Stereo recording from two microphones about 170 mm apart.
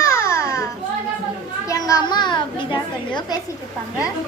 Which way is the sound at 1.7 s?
20° left (ahead or behind).